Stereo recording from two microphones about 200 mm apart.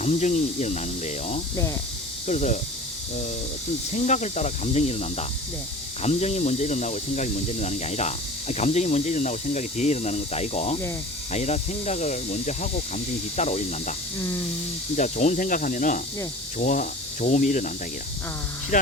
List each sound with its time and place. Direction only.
0.0 s speech: 35° left (ahead or behind)
3.9 s speech: 35° left (ahead or behind)
14.9 s speech: 35° left (ahead or behind)
18.7 s speech: 40° left (ahead or behind)